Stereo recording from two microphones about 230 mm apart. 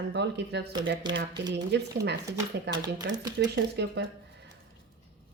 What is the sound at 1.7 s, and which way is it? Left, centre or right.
Speech, right.